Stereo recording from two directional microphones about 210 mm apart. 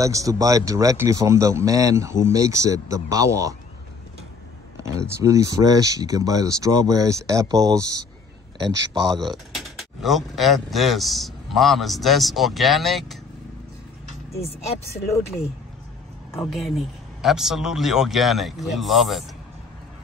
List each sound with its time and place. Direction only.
0.0 s speech: 15° right (ahead or behind)
4.7 s a sound: 15° right (ahead or behind)
5.2 s speech: 15° right (ahead or behind)
8.6 s speech: 60° right (ahead or behind)
9.5 s speech: centre (ahead or behind)
16.4 s speech: centre (ahead or behind)